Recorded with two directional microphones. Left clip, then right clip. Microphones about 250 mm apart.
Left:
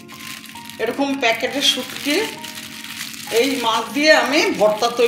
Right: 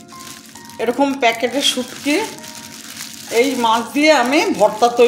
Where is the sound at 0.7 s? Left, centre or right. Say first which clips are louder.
Right 4 dB; right.